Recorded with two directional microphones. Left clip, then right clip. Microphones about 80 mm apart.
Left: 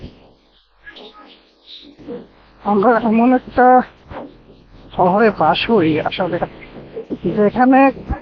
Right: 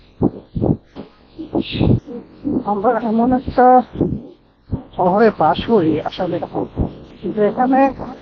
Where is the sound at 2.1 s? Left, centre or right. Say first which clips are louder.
Left 1 dB; right.